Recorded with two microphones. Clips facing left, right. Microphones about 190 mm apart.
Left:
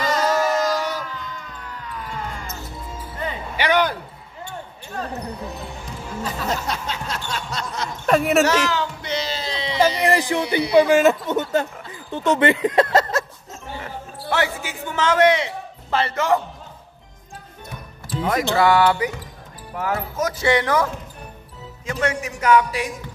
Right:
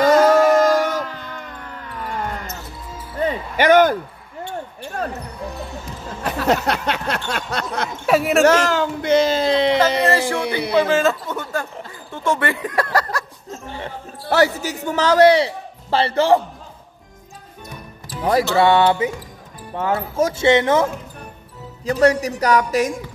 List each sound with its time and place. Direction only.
0.0 s music: 55° right (ahead or behind)
2.0 s basketball bounce: 55° right (ahead or behind)
3.2 s a sound: 45° right (ahead or behind)
6.2 s a sound: 65° right (ahead or behind)
8.1 s speech: centre (ahead or behind)
8.5 s speech: 50° right (ahead or behind)
10.0 s speech: 15° left (ahead or behind)
14.3 s a man's voice: 40° right (ahead or behind)
18.2 s speech: 25° right (ahead or behind)
21.8 s a man's voice: 35° right (ahead or behind)